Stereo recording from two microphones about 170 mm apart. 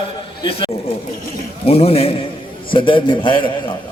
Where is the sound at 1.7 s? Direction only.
35° left (ahead or behind).